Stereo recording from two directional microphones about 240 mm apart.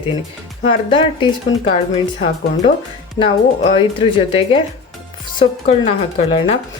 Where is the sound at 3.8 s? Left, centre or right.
Left.